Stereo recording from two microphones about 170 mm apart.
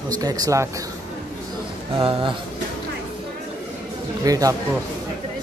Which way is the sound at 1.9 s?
30° right (ahead or behind).